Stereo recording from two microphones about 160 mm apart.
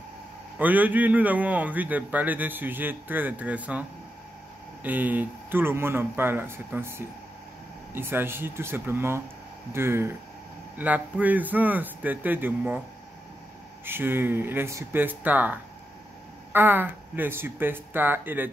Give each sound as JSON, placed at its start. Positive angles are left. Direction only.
{"t": 0.6, "sound": "a man's voice", "side_deg": -10}
{"t": 4.8, "sound": "a man's voice", "side_deg": -10}
{"t": 13.8, "sound": "a man's voice", "side_deg": -15}